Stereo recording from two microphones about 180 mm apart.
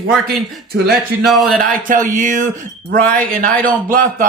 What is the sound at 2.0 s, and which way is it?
Speech, 45° right (ahead or behind).